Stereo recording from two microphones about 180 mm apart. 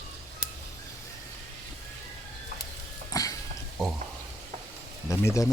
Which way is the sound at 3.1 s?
20° left (ahead or behind).